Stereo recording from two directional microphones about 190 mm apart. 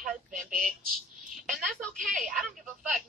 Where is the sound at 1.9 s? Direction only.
45° right (ahead or behind).